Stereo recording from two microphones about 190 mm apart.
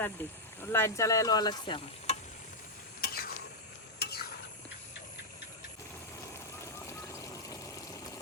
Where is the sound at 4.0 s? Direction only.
55° left (ahead or behind).